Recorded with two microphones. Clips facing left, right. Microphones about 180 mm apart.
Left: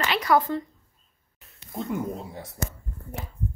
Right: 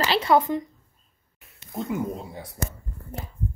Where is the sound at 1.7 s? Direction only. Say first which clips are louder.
Right 1 dB; centre (ahead or behind).